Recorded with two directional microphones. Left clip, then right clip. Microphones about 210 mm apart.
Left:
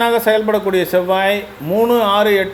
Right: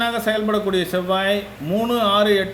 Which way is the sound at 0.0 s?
Centre (ahead or behind).